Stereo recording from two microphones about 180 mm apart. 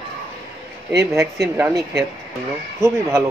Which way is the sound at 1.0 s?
15° right (ahead or behind).